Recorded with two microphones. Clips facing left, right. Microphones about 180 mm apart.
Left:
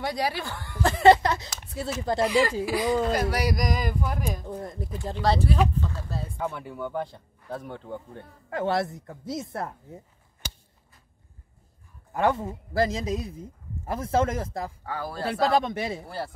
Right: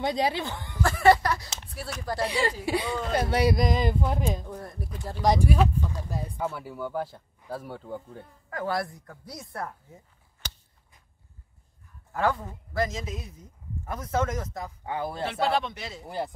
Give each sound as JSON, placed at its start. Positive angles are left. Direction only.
{"t": 0.0, "sound": "speech", "side_deg": -20}
{"t": 0.8, "sound": "speech", "side_deg": 20}
{"t": 2.2, "sound": "speech", "side_deg": -30}
{"t": 4.5, "sound": "speech", "side_deg": 20}
{"t": 5.2, "sound": "speech", "side_deg": -15}
{"t": 5.8, "sound": "a sound", "side_deg": -15}
{"t": 6.4, "sound": "speech", "side_deg": 0}
{"t": 8.5, "sound": "speech", "side_deg": 25}
{"t": 12.1, "sound": "speech", "side_deg": 20}
{"t": 14.9, "sound": "speech", "side_deg": -20}
{"t": 15.4, "sound": "speech", "side_deg": 45}
{"t": 16.1, "sound": "speech", "side_deg": -15}